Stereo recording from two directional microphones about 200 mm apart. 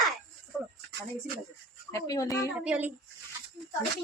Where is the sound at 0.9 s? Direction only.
50° right (ahead or behind).